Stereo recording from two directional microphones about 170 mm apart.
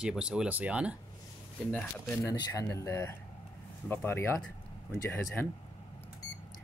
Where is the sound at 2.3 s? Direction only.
20° left (ahead or behind).